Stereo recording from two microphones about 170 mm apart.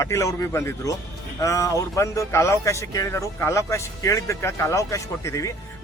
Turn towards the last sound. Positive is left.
turn(degrees=20)  # may be behind; listen again after turning